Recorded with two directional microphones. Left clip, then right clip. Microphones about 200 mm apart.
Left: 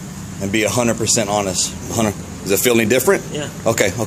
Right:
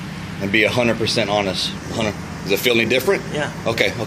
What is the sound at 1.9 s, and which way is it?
Speech, 40° left (ahead or behind).